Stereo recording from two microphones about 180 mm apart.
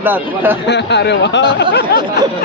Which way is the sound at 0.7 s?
70° left (ahead or behind).